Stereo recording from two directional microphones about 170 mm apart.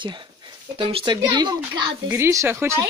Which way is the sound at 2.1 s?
15° right (ahead or behind).